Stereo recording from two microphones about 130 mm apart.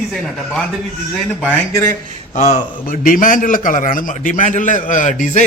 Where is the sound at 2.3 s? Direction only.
70° left (ahead or behind).